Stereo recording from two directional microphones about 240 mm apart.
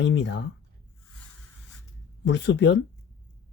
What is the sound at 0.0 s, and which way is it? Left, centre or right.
Speech, left.